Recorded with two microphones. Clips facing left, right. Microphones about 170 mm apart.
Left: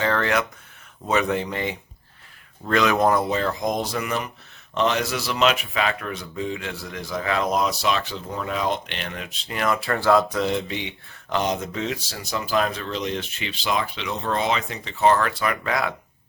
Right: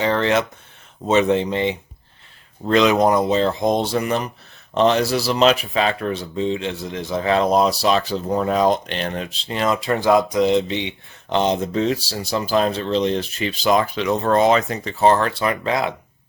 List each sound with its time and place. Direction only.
0.0 s speech: 20° right (ahead or behind)